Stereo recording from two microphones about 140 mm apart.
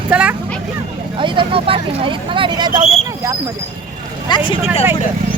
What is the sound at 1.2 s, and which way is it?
Speech, 40° right (ahead or behind).